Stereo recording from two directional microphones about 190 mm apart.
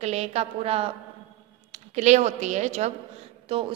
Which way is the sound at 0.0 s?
35° right (ahead or behind).